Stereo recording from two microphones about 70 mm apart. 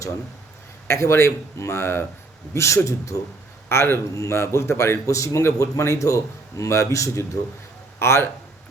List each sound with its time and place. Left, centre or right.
0.9 s a man's voice: left